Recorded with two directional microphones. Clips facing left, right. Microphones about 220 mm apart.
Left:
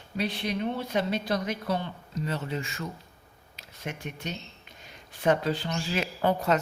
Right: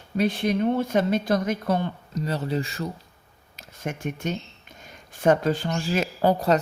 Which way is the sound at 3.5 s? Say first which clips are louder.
Right 5 dB; 45° right (ahead or behind).